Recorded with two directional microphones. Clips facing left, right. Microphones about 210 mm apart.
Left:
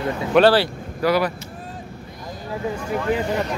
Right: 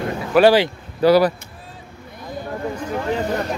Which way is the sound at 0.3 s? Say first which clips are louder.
Right 2 dB; 10° right (ahead or behind).